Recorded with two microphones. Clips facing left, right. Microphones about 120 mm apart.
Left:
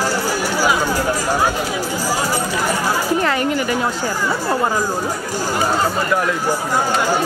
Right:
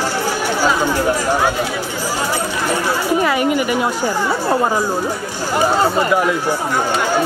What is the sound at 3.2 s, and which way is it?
Speech, 10° right (ahead or behind).